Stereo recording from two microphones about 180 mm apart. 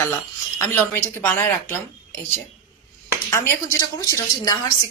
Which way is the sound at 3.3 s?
15° left (ahead or behind).